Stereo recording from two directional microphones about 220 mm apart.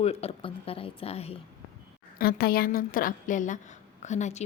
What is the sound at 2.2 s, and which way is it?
A woman's voice, 45° left (ahead or behind).